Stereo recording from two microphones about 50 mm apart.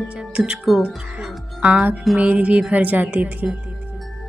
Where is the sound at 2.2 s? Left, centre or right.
Right.